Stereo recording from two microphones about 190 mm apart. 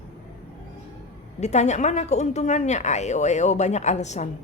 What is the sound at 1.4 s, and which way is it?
A woman's voice, 35° left (ahead or behind).